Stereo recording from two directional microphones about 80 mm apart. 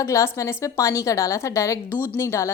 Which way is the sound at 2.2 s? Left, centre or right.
Left.